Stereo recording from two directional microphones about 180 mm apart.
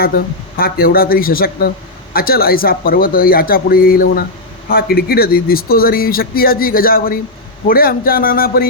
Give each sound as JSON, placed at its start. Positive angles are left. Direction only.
{"t": 0.0, "sound": "speech", "side_deg": 55}